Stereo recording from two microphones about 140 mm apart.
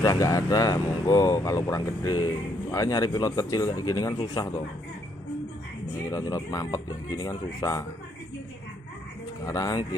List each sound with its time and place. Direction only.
0.0 s speech: 25° left (ahead or behind)
6.0 s speech: 25° left (ahead or behind)
9.4 s speech: 25° left (ahead or behind)